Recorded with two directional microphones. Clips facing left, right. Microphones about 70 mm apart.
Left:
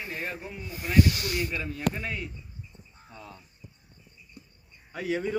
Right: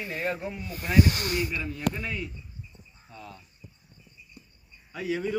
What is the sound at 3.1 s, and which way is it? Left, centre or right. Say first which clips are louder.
Speech: right 1 dB; left.